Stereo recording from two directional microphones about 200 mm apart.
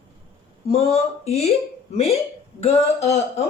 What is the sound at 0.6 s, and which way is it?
Speech, 30° left (ahead or behind).